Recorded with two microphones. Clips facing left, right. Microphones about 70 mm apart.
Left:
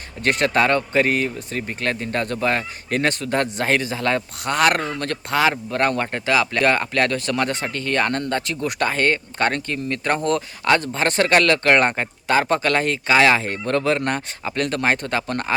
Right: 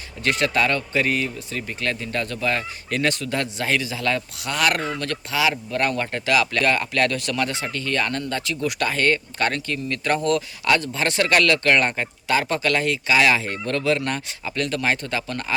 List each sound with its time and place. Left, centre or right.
0.2 s speech: left